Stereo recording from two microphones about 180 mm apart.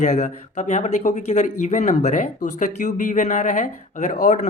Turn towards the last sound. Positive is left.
turn(degrees=40)  # may be behind; listen again after turning